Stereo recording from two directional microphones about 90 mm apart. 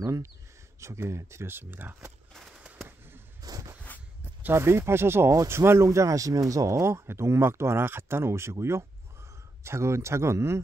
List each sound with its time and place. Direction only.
0.0 s a man's voice: 35° right (ahead or behind); by 2.1 s 20° right (ahead or behind)
3.4 s a sound: 40° right (ahead or behind)
4.4 s a man's voice: 25° right (ahead or behind)